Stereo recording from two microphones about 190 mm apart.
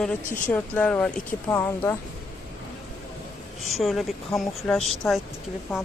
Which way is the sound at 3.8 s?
Centre (ahead or behind).